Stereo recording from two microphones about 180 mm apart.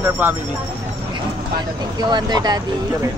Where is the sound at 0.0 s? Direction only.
10° right (ahead or behind).